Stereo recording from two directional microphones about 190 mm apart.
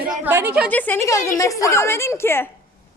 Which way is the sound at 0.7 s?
10° left (ahead or behind).